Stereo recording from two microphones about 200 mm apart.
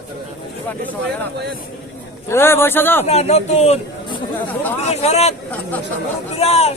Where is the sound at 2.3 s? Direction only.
10° left (ahead or behind).